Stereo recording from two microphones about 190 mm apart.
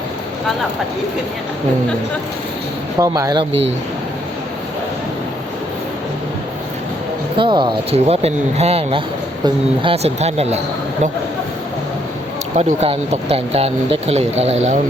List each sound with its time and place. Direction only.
3.0 s speech: 20° right (ahead or behind)
7.3 s speech: 25° right (ahead or behind)
12.5 s speech: 35° right (ahead or behind)